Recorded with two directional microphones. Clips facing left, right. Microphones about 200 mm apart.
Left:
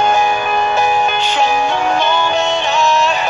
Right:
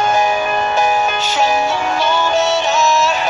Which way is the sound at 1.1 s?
45° right (ahead or behind).